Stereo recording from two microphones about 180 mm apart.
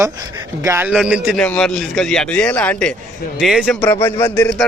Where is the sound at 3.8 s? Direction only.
10° left (ahead or behind).